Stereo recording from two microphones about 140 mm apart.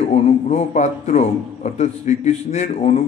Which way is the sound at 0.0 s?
50° left (ahead or behind).